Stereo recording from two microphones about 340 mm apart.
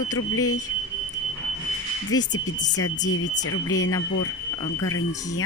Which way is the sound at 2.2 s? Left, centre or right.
Left.